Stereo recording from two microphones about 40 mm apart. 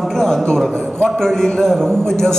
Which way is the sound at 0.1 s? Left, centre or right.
Centre.